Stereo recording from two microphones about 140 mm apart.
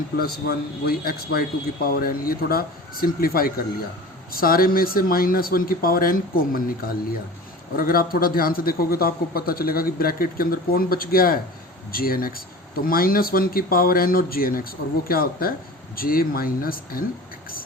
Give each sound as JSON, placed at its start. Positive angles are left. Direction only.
{"t": 0.2, "sound": "speech", "side_deg": 90}